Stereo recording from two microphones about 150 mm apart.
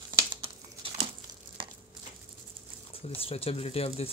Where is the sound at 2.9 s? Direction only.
40° left (ahead or behind).